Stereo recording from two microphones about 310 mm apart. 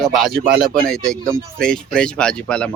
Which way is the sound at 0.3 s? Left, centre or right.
Right.